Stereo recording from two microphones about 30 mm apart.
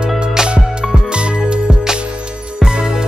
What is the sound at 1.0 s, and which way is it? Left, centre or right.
Music, right.